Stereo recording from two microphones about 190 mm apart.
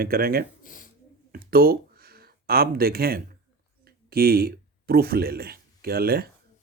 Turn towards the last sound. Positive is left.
turn(degrees=-55)  # may be behind; listen again after turning